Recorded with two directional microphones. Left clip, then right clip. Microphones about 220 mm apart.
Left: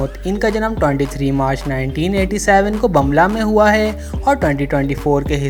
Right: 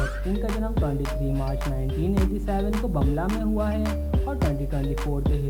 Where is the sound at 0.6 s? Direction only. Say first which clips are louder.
Left 13 dB; 35° left (ahead or behind).